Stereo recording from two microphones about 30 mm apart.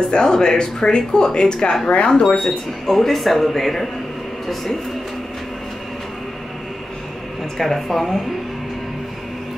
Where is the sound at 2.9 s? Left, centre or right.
Centre.